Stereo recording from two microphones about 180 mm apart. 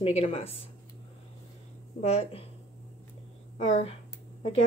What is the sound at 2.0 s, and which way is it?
Speech, 35° left (ahead or behind).